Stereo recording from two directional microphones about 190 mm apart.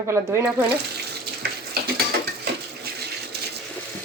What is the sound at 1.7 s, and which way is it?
Mechanisms, 55° right (ahead or behind).